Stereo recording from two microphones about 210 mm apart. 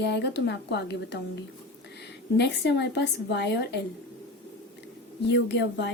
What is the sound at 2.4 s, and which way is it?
Speech, 55° left (ahead or behind).